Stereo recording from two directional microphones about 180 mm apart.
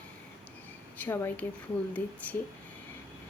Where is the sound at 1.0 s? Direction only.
10° left (ahead or behind).